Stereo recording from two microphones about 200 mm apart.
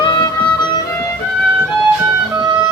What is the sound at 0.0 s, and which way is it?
Music, 20° left (ahead or behind).